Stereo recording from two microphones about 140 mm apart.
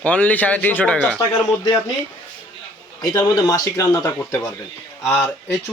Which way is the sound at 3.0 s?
25° left (ahead or behind).